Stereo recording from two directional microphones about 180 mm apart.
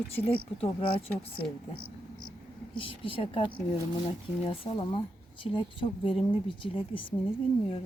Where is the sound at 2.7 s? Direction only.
30° left (ahead or behind).